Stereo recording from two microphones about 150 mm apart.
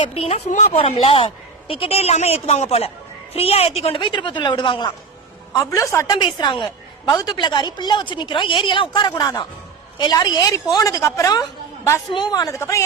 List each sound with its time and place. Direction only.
0.0 s a woman's voice: 40° left (ahead or behind)
0.8 s a woman's voice: 40° left (ahead or behind)
5.5 s a woman's voice: 20° left (ahead or behind)
6.2 s a woman's voice: 35° left (ahead or behind)